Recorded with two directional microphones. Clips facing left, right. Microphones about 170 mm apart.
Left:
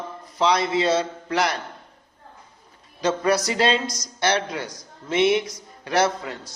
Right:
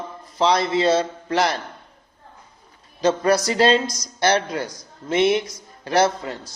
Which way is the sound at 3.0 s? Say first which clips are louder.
Right 3 dB; 30° right (ahead or behind).